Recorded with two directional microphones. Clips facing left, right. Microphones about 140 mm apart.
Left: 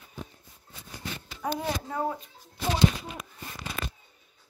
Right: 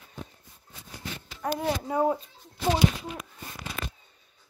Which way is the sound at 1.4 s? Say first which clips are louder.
Right 2 dB; 10° right (ahead or behind).